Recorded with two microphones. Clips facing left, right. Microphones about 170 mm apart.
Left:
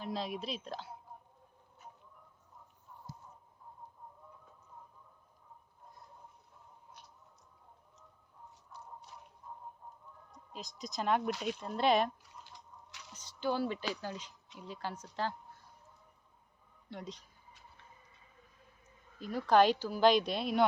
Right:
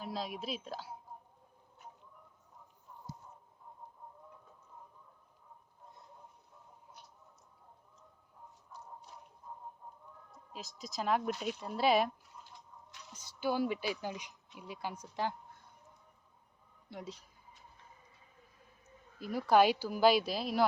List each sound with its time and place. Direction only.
0.0 s a woman's voice: centre (ahead or behind)
10.3 s speech: 5° right (ahead or behind)
12.2 s a sound: 85° left
13.1 s a sound: 10° right (ahead or behind)
13.9 s speech: 15° right (ahead or behind)
16.9 s speech: 5° right (ahead or behind)
19.2 s speech: 10° right (ahead or behind)